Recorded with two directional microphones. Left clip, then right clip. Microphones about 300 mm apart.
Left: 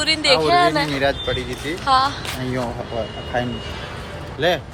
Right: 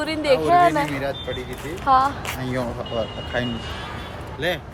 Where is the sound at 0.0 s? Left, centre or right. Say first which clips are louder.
Left 3 dB; centre.